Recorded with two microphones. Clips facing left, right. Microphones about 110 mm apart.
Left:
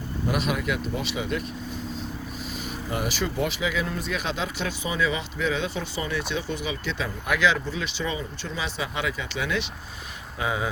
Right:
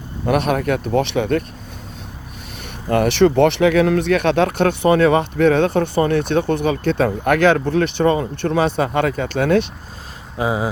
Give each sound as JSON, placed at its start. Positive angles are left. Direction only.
{"t": 0.3, "sound": "speech", "side_deg": -55}
{"t": 2.9, "sound": "speech", "side_deg": -65}
{"t": 10.3, "sound": "speech", "side_deg": -30}